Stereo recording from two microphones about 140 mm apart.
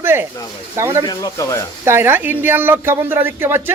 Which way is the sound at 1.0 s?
25° left (ahead or behind).